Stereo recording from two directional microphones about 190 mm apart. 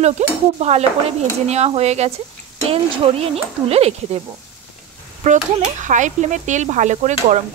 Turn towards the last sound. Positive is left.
turn(degrees=-35)  # may be behind; listen again after turning